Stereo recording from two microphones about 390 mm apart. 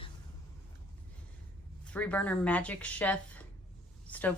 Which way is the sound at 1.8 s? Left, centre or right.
Centre.